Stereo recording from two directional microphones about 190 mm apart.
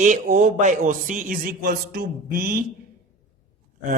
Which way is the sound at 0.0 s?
40° right (ahead or behind).